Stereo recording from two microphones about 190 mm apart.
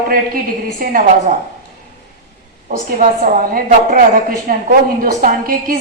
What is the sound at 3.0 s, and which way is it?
A woman's voice, 45° right (ahead or behind).